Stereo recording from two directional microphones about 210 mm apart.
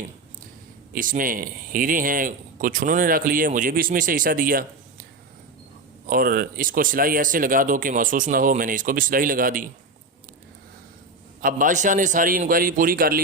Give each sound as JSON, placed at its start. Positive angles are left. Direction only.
{"t": 0.9, "sound": "a man's voice", "side_deg": -40}
{"t": 6.1, "sound": "a man's voice", "side_deg": -45}
{"t": 11.4, "sound": "a man's voice", "side_deg": -40}